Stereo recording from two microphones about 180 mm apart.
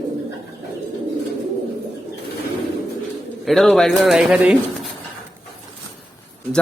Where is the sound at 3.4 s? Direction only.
Centre (ahead or behind).